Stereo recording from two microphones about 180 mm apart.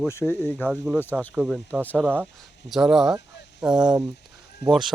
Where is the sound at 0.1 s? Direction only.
15° left (ahead or behind).